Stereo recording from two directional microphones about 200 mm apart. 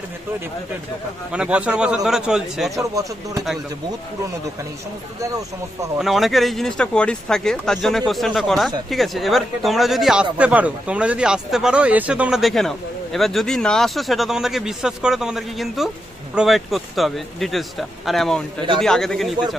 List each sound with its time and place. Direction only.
1.3 s speech: 5° right (ahead or behind)
2.8 s speech: 15° right (ahead or behind)
5.2 s speech: 15° right (ahead or behind)
5.9 s speech: centre (ahead or behind)